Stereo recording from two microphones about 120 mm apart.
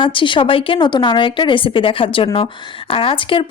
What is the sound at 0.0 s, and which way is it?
A woman's voice, 45° left (ahead or behind).